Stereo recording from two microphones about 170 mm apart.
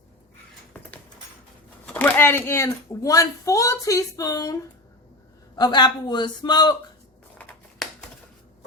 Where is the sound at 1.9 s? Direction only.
10° left (ahead or behind).